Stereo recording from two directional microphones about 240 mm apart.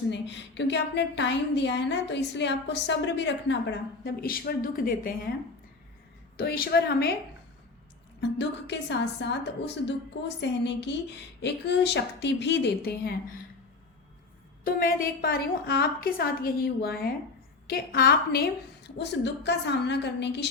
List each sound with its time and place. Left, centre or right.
0.1 s a woman's voice: left
6.3 s a woman's voice: left
8.4 s a woman's voice: left
14.6 s a woman's voice: left